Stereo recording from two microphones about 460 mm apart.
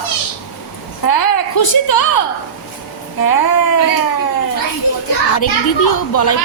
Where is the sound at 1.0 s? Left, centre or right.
Left.